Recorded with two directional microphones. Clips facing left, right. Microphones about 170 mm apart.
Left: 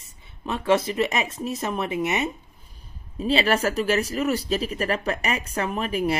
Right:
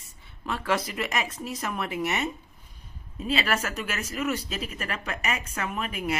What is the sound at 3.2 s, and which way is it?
Speech, 30° left (ahead or behind).